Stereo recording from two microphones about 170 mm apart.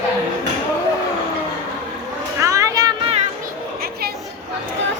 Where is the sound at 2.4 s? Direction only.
20° right (ahead or behind).